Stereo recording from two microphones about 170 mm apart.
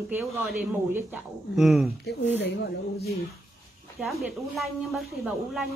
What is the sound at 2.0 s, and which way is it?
Speech, 90° left.